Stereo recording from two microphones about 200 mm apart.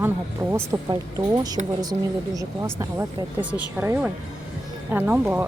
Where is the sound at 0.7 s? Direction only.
10° right (ahead or behind).